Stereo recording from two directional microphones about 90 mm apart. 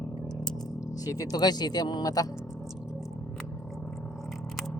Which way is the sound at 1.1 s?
45° left (ahead or behind).